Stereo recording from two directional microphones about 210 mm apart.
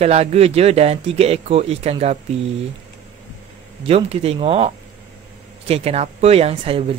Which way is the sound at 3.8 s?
30° right (ahead or behind).